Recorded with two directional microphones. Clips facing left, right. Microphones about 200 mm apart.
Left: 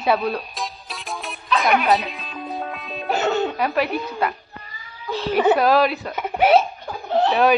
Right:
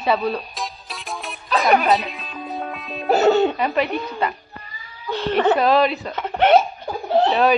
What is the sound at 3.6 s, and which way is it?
Speech, 5° left (ahead or behind).